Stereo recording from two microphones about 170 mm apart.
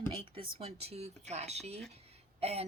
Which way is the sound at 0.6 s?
35° right (ahead or behind).